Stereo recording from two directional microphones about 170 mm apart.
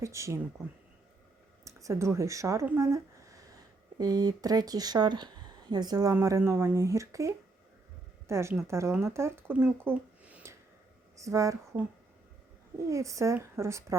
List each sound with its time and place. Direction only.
0.0 s speech: 15° right (ahead or behind)
1.6 s speech: 15° right (ahead or behind)
9.8 s a sound: 10° right (ahead or behind)
11.2 s speech: 20° right (ahead or behind)